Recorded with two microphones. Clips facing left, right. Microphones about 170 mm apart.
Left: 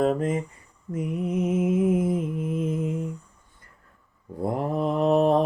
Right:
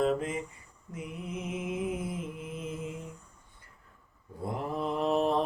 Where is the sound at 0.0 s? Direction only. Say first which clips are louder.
Left 5 dB; 45° left (ahead or behind).